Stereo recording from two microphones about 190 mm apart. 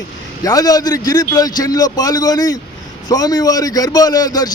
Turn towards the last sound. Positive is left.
turn(degrees=20)  # may be behind; listen again after turning